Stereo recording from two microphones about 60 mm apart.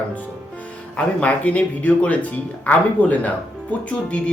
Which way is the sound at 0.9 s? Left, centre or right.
Left.